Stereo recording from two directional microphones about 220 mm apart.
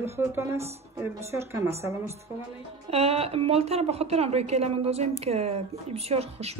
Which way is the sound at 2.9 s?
25° right (ahead or behind).